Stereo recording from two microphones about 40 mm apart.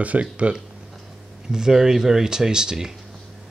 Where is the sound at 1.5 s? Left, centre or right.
Centre.